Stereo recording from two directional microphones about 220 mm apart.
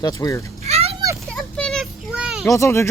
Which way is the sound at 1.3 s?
5° left (ahead or behind).